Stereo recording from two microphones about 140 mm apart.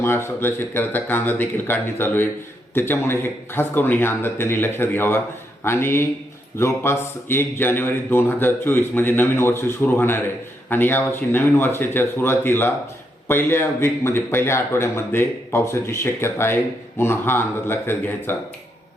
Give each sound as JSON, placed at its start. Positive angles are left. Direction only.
{"t": 0.0, "sound": "a man's voice", "side_deg": 15}